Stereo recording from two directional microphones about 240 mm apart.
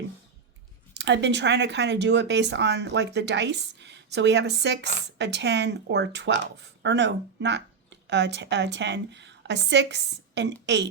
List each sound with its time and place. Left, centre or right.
0.9 s speech: right